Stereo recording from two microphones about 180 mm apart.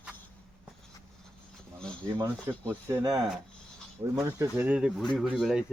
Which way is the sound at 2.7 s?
15° right (ahead or behind).